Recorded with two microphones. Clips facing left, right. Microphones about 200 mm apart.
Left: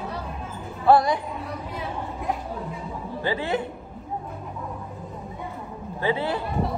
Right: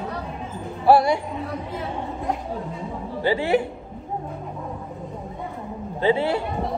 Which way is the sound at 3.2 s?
15° right (ahead or behind).